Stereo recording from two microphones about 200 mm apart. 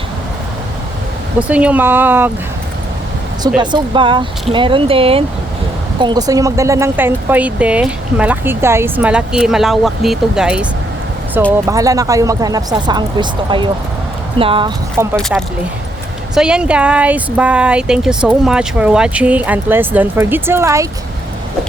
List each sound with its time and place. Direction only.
1.4 s speech: 5° right (ahead or behind)
3.6 s speech: 20° right (ahead or behind); by 10.7 s 5° right (ahead or behind)
11.6 s speech: 15° right (ahead or behind)
15.1 s speech: centre (ahead or behind); by 20.8 s 15° right (ahead or behind)